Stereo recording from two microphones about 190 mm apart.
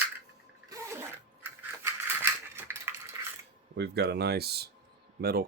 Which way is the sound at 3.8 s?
60° right (ahead or behind).